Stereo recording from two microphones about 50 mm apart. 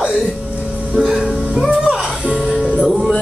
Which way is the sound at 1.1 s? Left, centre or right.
Centre.